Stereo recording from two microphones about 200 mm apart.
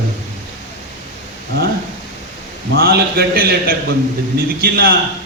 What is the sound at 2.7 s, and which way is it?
Speech, 50° right (ahead or behind).